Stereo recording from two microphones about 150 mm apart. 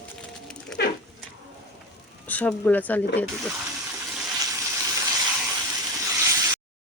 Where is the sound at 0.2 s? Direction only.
5° left (ahead or behind).